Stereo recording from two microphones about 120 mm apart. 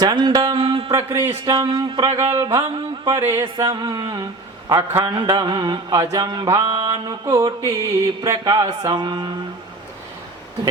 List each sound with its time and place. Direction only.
0.0 s mantra: 35° right (ahead or behind)
0.5 s a sound: 50° right (ahead or behind)
1.5 s mantra: 45° right (ahead or behind)
2.6 s mantra: 40° right (ahead or behind)
3.1 s music: 20° right (ahead or behind)
3.6 s mantra: 35° right (ahead or behind)
4.7 s a man's voice: 20° right (ahead or behind)
5.2 s mantra: 35° right (ahead or behind)